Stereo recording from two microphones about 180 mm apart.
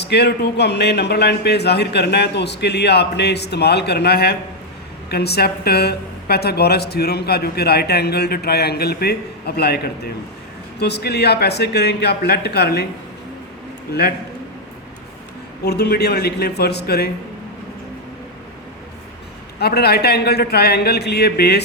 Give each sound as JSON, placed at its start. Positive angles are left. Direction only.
{"t": 0.0, "sound": "a woman's voice", "side_deg": 70}
{"t": 15.6, "sound": "a woman's voice", "side_deg": 65}
{"t": 19.5, "sound": "a woman's voice", "side_deg": 65}